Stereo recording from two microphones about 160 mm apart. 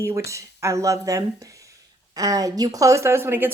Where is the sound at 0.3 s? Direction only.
20° right (ahead or behind).